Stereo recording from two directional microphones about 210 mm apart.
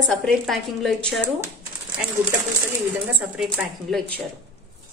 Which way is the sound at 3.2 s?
5° right (ahead or behind).